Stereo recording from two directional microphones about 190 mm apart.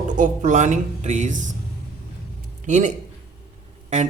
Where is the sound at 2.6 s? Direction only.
40° right (ahead or behind).